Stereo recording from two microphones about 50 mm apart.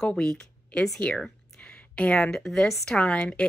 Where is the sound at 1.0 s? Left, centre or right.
Centre.